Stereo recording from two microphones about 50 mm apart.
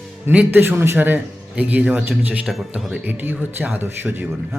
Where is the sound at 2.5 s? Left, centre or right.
Centre.